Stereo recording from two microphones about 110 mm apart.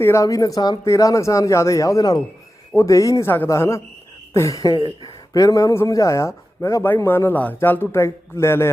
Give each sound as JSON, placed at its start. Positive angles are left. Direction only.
{"t": 0.0, "sound": "speech", "side_deg": 25}